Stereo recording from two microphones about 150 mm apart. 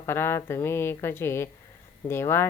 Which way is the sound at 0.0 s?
15° left (ahead or behind).